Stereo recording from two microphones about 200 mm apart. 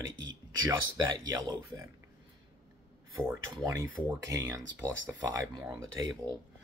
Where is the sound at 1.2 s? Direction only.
15° right (ahead or behind).